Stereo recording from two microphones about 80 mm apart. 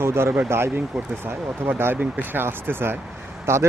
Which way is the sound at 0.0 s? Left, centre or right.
Right.